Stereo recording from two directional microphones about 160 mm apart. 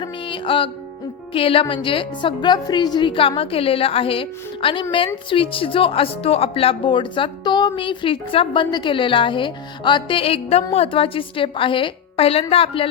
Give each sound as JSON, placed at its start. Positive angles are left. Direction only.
{"t": 0.0, "sound": "music", "side_deg": 30}
{"t": 1.3, "sound": "a woman's voice", "side_deg": 35}